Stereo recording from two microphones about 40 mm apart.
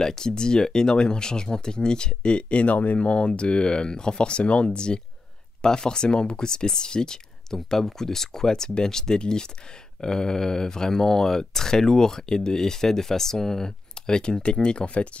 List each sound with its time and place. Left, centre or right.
0.0 s speech: centre